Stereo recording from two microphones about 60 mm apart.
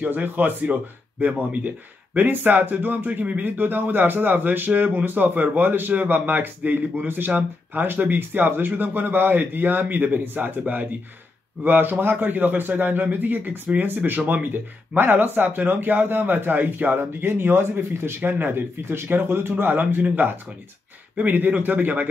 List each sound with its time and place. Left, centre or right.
0.1 s speech: right
19.5 s speech: right